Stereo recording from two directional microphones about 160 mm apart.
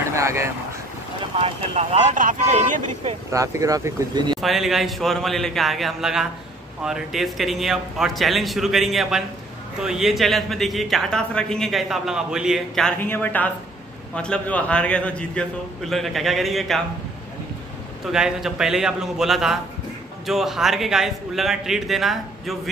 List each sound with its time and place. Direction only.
0.1 s vehicle: 15° right (ahead or behind)
1.4 s speech: 40° right (ahead or behind)
2.0 s speech: 55° right (ahead or behind)
3.3 s speech: 20° right (ahead or behind)
4.4 s speech: centre (ahead or behind)
13.0 s speech: 10° left (ahead or behind)
18.1 s speech: 5° right (ahead or behind)